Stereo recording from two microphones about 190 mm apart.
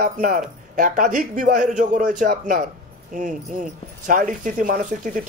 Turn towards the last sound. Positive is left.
turn(degrees=-45)  # may be behind; listen again after turning